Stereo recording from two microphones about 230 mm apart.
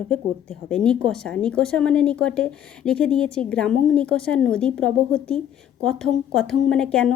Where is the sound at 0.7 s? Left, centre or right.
Centre.